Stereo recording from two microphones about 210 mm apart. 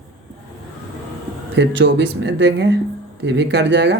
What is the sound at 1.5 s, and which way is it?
Speech, 55° right (ahead or behind).